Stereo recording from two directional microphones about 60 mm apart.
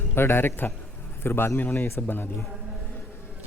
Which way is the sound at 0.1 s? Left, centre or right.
Left.